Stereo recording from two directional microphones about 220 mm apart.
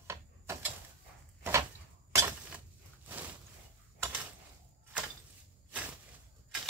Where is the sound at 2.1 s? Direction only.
10° right (ahead or behind).